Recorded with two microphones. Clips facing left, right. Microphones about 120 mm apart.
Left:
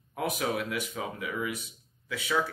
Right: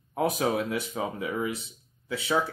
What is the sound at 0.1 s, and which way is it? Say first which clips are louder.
Speech: right 5 dB; 35° right (ahead or behind).